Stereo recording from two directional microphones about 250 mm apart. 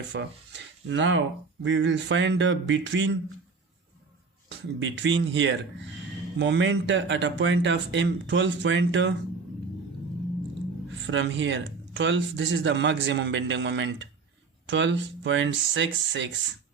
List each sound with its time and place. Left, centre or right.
0.1 s speech: right
4.4 s speech: right
10.8 s speech: right